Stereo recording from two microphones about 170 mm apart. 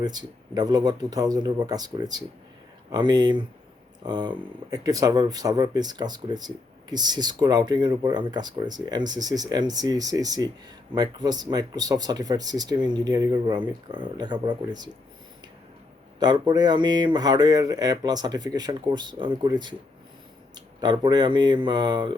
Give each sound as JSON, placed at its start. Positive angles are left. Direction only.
{"t": 0.0, "sound": "speech", "side_deg": -25}
{"t": 16.2, "sound": "speech", "side_deg": -25}
{"t": 20.8, "sound": "speech", "side_deg": -25}